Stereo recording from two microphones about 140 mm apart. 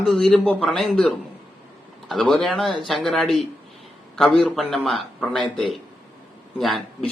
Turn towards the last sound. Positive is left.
turn(degrees=0)  # may be behind; listen again after turning